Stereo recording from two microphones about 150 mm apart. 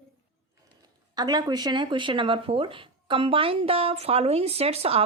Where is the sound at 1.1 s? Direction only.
25° right (ahead or behind).